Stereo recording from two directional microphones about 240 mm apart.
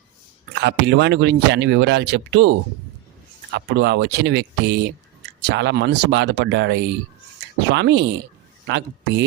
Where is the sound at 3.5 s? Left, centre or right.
Right.